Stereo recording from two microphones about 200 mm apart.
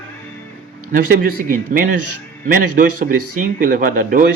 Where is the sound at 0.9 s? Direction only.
45° right (ahead or behind).